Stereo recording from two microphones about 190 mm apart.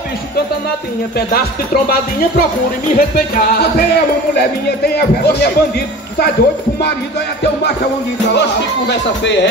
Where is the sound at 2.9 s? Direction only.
55° left (ahead or behind).